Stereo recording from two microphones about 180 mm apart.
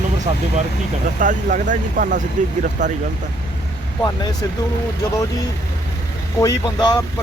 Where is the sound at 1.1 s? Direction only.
45° right (ahead or behind).